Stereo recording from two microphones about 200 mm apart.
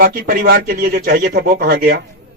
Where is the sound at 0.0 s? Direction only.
45° right (ahead or behind).